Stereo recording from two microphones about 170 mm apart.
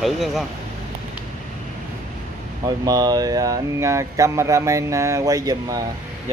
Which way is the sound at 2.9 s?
20° right (ahead or behind).